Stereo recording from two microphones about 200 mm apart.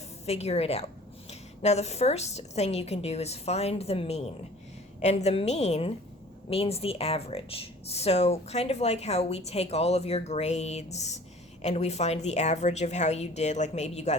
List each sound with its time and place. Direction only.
0.3 s speech: 30° left (ahead or behind)